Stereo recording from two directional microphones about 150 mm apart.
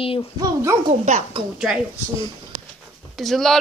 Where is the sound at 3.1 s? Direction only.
Centre (ahead or behind).